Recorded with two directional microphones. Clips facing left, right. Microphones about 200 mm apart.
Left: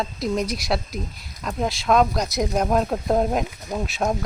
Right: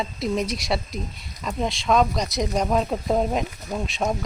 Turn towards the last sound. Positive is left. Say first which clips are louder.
# left 1 dB
turn(degrees=0)  # may be behind; listen again after turning